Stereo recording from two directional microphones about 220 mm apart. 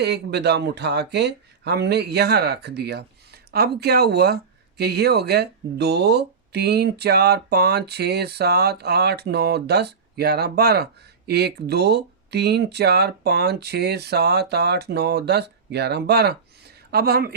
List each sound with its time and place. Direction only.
0.0 s speech: 50° right (ahead or behind)